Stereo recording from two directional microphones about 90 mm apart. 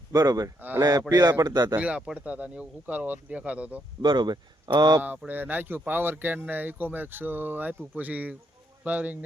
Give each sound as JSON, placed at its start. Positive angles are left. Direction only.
{"t": 0.1, "sound": "speech", "side_deg": -45}
{"t": 1.8, "sound": "speech", "side_deg": -10}
{"t": 4.0, "sound": "speech", "side_deg": -55}
{"t": 5.3, "sound": "speech", "side_deg": -20}